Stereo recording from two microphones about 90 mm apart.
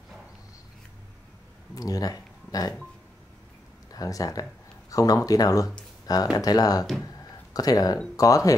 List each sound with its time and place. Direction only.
1.8 s speech: 45° left (ahead or behind)
3.9 s speech: 40° left (ahead or behind)